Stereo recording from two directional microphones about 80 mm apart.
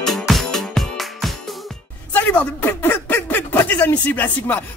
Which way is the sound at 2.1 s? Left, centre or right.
Left.